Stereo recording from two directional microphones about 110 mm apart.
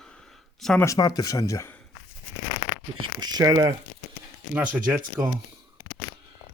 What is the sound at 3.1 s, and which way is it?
Speech, 40° right (ahead or behind).